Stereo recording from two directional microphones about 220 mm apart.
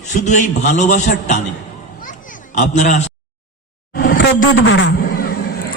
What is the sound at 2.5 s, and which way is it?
Speech, 35° left (ahead or behind).